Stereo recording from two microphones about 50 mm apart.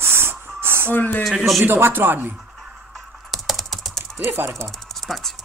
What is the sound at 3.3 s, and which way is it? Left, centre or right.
Typing, centre.